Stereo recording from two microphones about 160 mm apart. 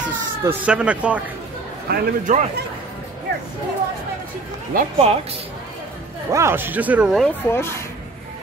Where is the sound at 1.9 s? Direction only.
90° right.